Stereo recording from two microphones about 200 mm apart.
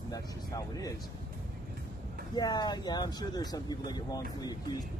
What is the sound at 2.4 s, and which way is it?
Speech, 20° left (ahead or behind).